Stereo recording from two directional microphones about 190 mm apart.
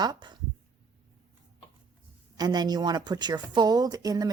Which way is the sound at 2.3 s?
20° right (ahead or behind).